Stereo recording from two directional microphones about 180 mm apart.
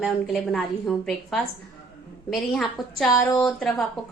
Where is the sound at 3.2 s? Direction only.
15° left (ahead or behind).